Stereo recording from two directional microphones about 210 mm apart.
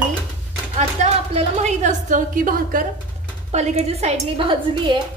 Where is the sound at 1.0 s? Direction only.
30° right (ahead or behind).